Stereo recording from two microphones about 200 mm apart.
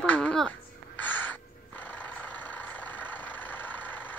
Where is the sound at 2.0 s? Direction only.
10° left (ahead or behind).